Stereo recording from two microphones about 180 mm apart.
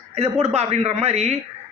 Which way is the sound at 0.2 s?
35° right (ahead or behind).